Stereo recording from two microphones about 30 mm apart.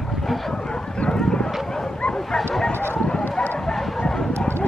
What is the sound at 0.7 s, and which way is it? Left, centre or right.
Bow-wow, left.